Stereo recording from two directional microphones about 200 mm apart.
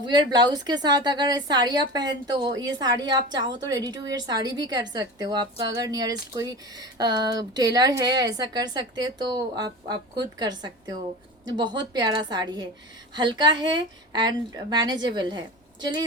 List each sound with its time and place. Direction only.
0.0 s a woman's voice: 20° right (ahead or behind)